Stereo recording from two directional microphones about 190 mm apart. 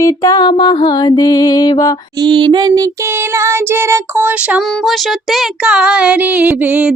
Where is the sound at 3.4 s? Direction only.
15° right (ahead or behind).